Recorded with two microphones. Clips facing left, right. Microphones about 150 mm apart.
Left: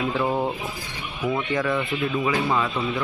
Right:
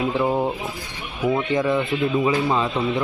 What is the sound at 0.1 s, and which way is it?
Speech, 10° right (ahead or behind).